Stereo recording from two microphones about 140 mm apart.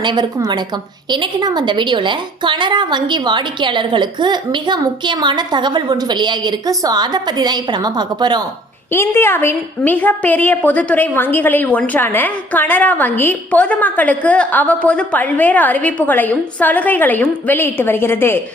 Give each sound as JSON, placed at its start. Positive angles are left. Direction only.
{"t": 0.0, "sound": "a woman's voice", "side_deg": -30}
{"t": 8.9, "sound": "a woman's voice", "side_deg": 15}